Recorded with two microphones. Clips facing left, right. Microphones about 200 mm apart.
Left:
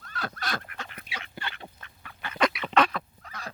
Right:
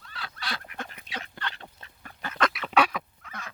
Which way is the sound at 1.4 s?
10° left (ahead or behind).